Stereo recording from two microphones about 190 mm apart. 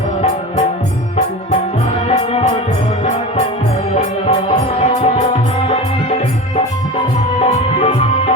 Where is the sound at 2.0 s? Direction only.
30° left (ahead or behind).